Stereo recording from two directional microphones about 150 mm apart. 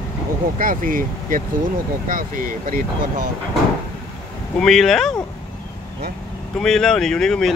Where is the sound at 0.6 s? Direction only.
65° right (ahead or behind).